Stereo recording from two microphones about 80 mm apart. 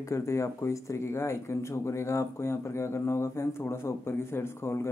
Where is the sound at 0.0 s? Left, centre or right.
Left.